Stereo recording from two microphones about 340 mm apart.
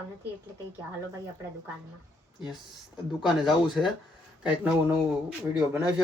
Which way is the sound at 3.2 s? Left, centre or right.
Centre.